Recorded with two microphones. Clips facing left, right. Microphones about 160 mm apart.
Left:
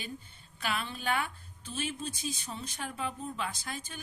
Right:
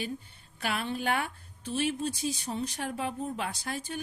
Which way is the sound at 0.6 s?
55° right (ahead or behind).